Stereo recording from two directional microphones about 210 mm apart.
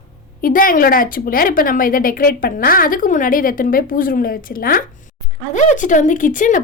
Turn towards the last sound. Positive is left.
turn(degrees=40)  # may be behind; listen again after turning